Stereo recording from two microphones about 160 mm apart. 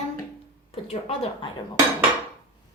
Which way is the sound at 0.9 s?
40° left (ahead or behind).